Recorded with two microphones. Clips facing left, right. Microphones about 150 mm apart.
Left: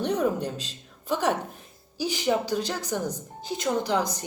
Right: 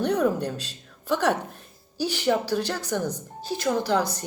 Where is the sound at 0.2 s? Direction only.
15° left (ahead or behind).